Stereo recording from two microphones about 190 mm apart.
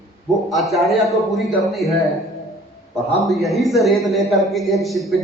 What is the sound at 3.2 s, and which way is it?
A man's voice, centre (ahead or behind).